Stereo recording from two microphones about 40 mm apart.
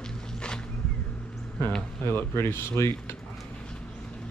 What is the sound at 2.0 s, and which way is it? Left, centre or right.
Speech, left.